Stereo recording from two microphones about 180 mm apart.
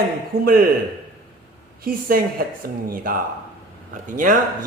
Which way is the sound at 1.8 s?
55° right (ahead or behind).